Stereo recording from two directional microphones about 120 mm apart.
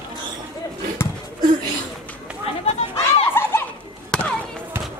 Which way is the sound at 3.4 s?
15° left (ahead or behind).